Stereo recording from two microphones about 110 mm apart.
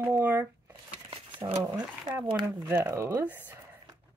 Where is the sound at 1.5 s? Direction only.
35° right (ahead or behind).